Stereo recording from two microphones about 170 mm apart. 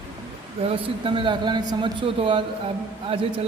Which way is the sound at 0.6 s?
30° right (ahead or behind).